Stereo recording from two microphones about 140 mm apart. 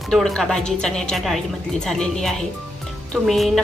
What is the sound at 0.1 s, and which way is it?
A woman's voice, centre (ahead or behind).